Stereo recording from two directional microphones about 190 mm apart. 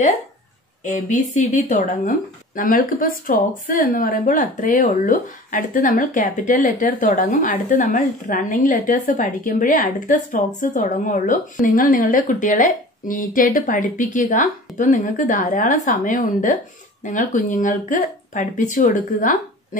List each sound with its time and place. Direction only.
0.8 s speech: 40° left (ahead or behind)